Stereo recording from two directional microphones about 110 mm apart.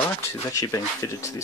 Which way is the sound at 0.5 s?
30° left (ahead or behind).